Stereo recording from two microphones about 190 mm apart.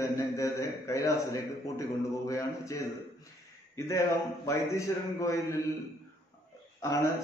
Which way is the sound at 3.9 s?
15° left (ahead or behind).